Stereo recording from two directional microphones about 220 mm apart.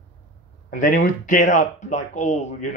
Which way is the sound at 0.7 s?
35° left (ahead or behind).